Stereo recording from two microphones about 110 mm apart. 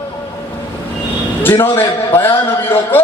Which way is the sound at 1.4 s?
20° left (ahead or behind).